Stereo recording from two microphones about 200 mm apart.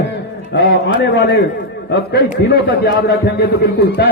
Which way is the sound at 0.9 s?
60° left (ahead or behind).